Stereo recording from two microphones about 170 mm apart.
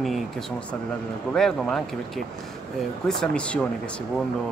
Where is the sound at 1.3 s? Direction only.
5° left (ahead or behind).